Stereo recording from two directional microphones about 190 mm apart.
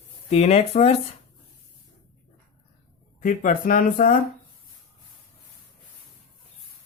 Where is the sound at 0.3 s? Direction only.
35° left (ahead or behind).